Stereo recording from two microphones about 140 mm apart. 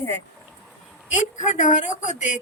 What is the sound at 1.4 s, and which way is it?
Speech, 60° left (ahead or behind).